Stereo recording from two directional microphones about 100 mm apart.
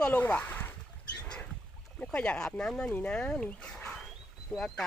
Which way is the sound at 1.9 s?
10° left (ahead or behind).